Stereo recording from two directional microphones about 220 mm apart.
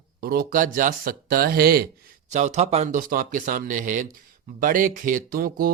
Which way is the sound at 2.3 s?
30° right (ahead or behind).